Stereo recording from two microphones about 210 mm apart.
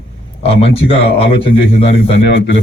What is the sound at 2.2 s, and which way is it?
Speech, 60° left (ahead or behind).